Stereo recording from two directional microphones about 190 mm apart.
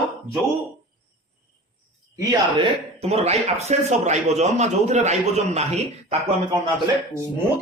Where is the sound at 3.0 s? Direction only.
35° right (ahead or behind).